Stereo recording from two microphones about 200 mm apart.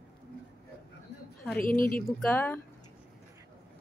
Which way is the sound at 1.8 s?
45° left (ahead or behind).